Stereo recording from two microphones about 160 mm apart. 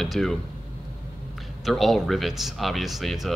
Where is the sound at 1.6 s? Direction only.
Centre (ahead or behind).